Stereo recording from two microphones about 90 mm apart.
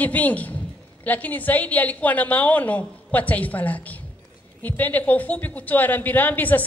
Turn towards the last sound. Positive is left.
turn(degrees=20)  # may be behind; listen again after turning